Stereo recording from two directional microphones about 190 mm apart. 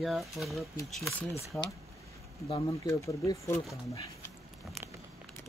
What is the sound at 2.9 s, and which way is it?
Speech, 15° left (ahead or behind).